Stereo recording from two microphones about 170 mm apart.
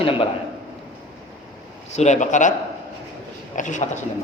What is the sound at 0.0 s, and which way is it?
Speech, 30° left (ahead or behind).